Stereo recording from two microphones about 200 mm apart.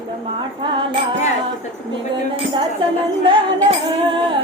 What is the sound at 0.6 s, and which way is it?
Music, 25° right (ahead or behind).